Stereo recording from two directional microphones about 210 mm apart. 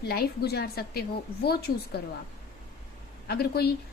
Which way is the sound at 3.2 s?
50° left (ahead or behind).